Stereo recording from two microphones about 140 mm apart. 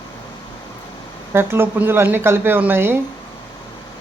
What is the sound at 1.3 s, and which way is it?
Speech, 15° right (ahead or behind).